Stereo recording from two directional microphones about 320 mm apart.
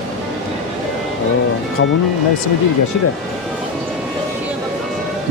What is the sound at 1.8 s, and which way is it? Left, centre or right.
Speech, left.